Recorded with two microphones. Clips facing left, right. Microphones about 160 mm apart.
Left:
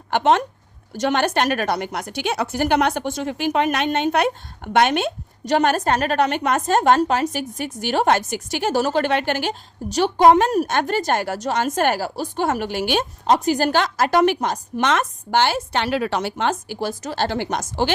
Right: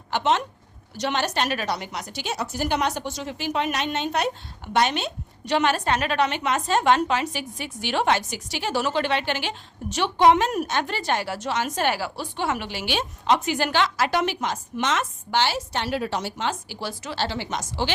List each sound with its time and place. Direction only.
0.1 s a woman's voice: 55° left (ahead or behind); by 10.7 s 40° left (ahead or behind)
10.7 s a woman's voice: 50° left (ahead or behind)